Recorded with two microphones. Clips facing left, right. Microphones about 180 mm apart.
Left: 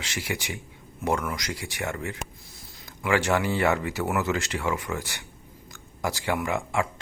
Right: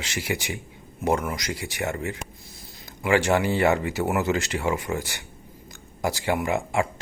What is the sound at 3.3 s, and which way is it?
Speech, 30° right (ahead or behind).